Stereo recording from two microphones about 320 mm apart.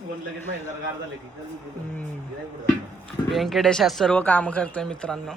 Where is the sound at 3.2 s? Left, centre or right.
Centre.